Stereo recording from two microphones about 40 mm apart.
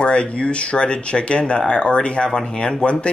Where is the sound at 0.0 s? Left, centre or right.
Left.